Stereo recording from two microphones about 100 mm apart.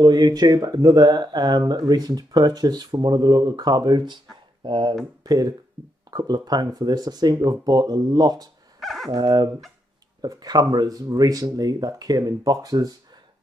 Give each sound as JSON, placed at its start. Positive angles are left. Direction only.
{"t": 0.0, "sound": "speech", "side_deg": -45}
{"t": 5.2, "sound": "speech", "side_deg": -40}
{"t": 8.8, "sound": "speech", "side_deg": 0}
{"t": 9.1, "sound": "speech", "side_deg": -45}